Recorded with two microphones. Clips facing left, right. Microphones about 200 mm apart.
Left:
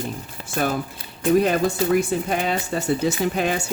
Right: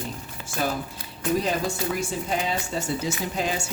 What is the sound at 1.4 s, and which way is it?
Speech, 60° left (ahead or behind).